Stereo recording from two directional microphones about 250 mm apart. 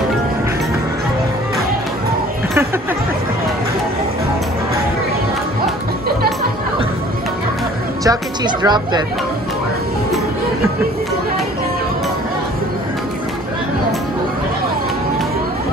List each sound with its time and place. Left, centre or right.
8.0 s speech: centre